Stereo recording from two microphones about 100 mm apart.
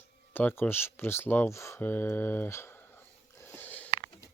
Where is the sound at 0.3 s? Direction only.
20° left (ahead or behind).